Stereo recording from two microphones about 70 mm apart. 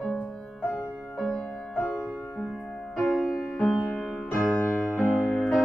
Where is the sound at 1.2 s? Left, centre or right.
Centre.